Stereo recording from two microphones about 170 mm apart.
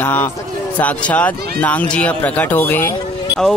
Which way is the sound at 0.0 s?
10° left (ahead or behind).